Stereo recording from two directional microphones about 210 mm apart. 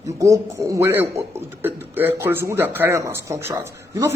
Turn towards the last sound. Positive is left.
turn(degrees=-15)  # may be behind; listen again after turning